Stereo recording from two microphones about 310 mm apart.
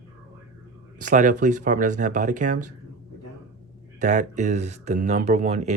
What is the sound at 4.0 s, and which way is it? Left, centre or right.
Speech, right.